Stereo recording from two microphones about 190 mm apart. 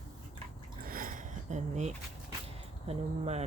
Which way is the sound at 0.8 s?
50° right (ahead or behind).